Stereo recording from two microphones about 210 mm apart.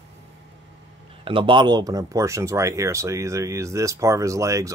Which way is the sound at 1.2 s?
25° right (ahead or behind).